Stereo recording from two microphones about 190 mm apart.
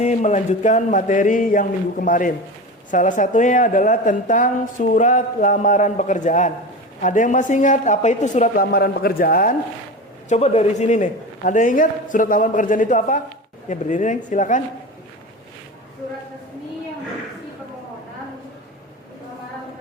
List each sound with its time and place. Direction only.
0.0 s a woman's voice: 40° left (ahead or behind)
10.2 s a woman's voice: 35° left (ahead or behind)